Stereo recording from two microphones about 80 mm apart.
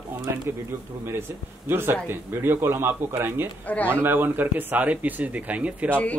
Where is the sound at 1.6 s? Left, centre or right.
Right.